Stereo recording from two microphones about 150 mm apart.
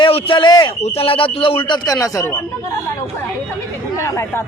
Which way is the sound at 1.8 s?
20° left (ahead or behind).